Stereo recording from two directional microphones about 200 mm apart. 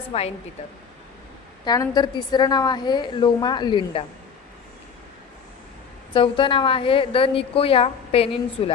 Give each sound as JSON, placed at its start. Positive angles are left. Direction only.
{"t": 0.1, "sound": "speech", "side_deg": 30}
{"t": 1.6, "sound": "a woman's voice", "side_deg": 20}
{"t": 6.1, "sound": "a woman's voice", "side_deg": 25}